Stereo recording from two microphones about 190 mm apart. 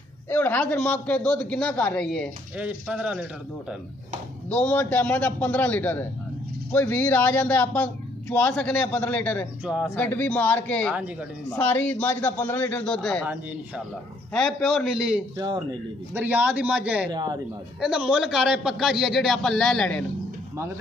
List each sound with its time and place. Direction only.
0.3 s a man's voice: 10° left (ahead or behind)
2.5 s a man's voice: 5° right (ahead or behind)
4.5 s speech: 5° left (ahead or behind)
9.7 s a man's voice: 5° right (ahead or behind)
9.9 s speech: 10° left (ahead or behind)
14.3 s a man's voice: 5° left (ahead or behind)
15.3 s a man's voice: 20° right (ahead or behind)
16.1 s a man's voice: 10° right (ahead or behind)
17.1 s a man's voice: 20° right (ahead or behind)
17.7 s a man's voice: 5° right (ahead or behind)